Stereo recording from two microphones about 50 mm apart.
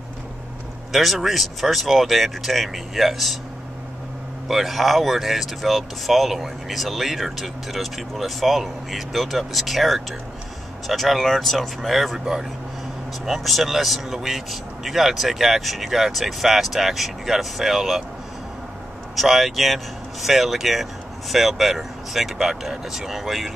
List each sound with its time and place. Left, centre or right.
0.9 s speech: centre
4.5 s speech: centre
19.1 s speech: centre